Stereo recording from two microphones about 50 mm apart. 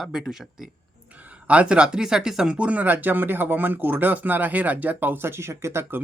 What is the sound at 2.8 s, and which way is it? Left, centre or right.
Speech, right.